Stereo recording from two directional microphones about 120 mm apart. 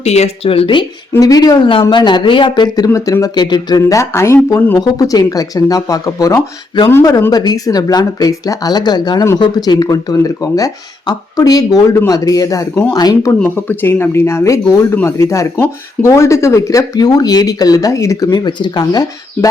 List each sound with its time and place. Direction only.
0.0 s speech: 65° left (ahead or behind); by 0.9 s 45° left (ahead or behind)
1.1 s speech: 30° left (ahead or behind)
13.4 s speech: 15° left (ahead or behind)
18.3 s speech: 40° left (ahead or behind)